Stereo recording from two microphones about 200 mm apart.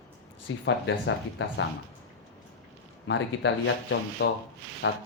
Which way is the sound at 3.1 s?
70° left (ahead or behind).